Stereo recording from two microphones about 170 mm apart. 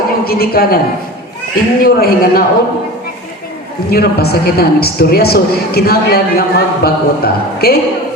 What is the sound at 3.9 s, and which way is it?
A man's voice, 65° left (ahead or behind).